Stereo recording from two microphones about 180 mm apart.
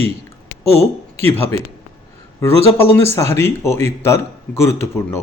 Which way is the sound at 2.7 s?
15° left (ahead or behind).